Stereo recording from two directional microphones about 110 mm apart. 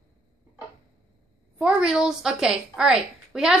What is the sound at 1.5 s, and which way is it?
A woman's voice, 10° right (ahead or behind).